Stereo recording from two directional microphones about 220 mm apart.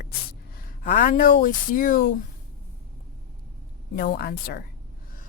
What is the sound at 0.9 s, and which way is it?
Speech, 40° left (ahead or behind).